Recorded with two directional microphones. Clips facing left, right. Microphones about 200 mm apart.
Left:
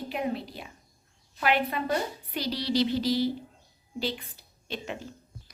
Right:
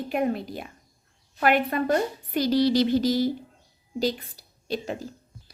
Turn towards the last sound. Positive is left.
turn(degrees=-40)  # may be behind; listen again after turning